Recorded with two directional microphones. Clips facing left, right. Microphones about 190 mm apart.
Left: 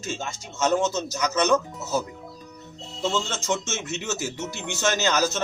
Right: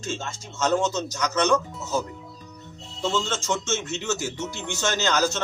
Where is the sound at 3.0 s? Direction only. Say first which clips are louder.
Even; 10° left (ahead or behind).